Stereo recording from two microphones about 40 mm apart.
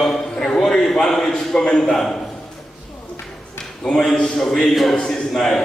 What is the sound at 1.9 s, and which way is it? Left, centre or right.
Speech, centre.